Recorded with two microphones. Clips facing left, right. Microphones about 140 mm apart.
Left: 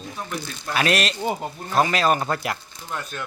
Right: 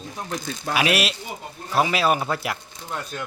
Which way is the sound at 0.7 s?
10° right (ahead or behind).